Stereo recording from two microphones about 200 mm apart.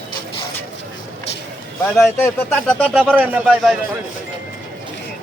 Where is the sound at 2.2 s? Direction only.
5° left (ahead or behind).